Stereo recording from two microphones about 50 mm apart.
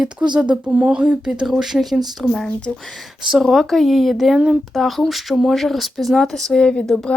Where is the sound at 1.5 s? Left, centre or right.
Centre.